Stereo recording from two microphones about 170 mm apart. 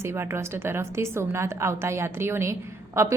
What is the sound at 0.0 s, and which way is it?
A woman's voice, 15° right (ahead or behind).